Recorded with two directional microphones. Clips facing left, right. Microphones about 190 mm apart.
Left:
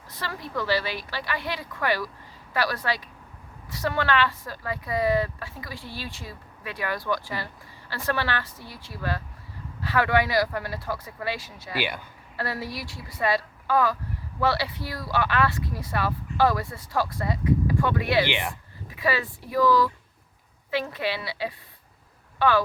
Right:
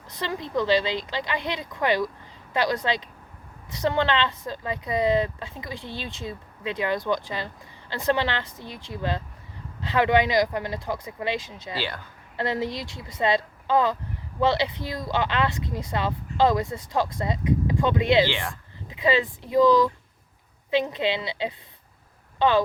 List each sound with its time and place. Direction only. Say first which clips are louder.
0.1 s a woman's voice: right 5 dB; 20° right (ahead or behind)
18.3 s speech: left 1 dB; 20° left (ahead or behind)
18.9 s a woman's voice: right 4 dB; 20° right (ahead or behind)